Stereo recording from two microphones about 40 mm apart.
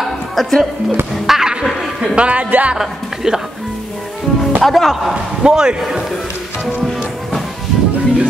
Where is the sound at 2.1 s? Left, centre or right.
Right.